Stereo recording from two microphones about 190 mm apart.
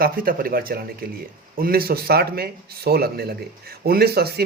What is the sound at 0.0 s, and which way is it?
A man's voice, 50° right (ahead or behind).